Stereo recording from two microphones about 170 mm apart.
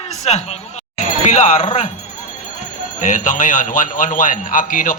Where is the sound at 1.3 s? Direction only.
40° left (ahead or behind).